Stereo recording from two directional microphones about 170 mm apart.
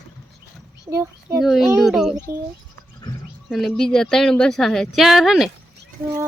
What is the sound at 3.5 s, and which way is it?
Speech, centre (ahead or behind).